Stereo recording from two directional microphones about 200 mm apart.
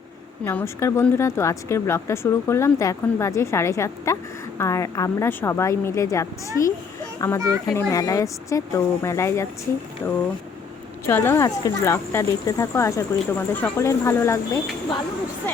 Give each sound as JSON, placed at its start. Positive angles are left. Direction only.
{"t": 0.4, "sound": "speech", "side_deg": 15}
{"t": 11.0, "sound": "speech", "side_deg": 10}